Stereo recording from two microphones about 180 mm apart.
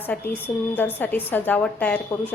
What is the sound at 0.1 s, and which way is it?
A woman's voice, 5° left (ahead or behind).